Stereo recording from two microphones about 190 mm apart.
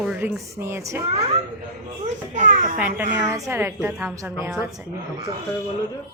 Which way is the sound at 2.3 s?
45° right (ahead or behind).